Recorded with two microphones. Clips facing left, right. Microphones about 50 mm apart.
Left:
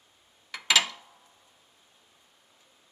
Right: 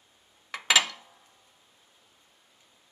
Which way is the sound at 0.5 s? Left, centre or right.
Right.